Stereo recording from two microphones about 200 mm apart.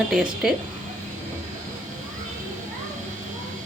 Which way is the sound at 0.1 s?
Centre (ahead or behind).